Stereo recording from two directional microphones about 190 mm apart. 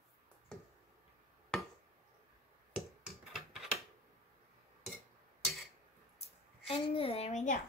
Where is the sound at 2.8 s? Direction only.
Centre (ahead or behind).